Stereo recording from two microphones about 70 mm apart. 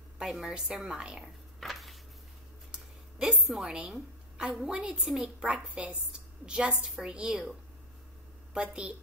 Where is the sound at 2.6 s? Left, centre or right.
Centre.